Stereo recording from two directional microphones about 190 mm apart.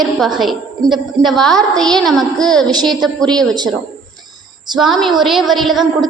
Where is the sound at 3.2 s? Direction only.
20° right (ahead or behind).